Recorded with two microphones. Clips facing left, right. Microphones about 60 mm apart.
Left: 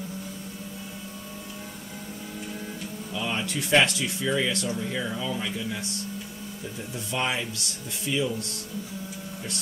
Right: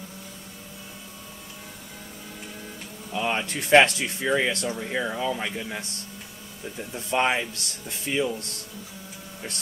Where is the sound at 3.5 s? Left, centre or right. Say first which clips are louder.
Right 5 dB; right.